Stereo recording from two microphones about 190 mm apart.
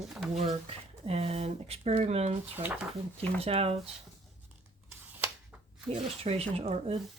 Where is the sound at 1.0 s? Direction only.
30° right (ahead or behind).